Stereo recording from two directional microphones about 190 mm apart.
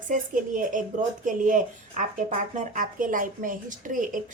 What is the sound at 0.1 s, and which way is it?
Speech, 45° right (ahead or behind).